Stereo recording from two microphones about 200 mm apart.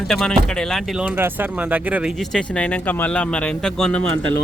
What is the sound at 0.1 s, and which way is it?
Speech, 5° left (ahead or behind).